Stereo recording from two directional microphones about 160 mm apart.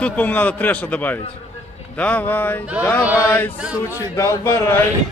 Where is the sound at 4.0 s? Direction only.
20° left (ahead or behind).